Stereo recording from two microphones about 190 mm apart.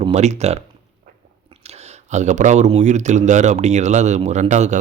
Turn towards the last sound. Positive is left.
turn(degrees=-40)  # may be behind; listen again after turning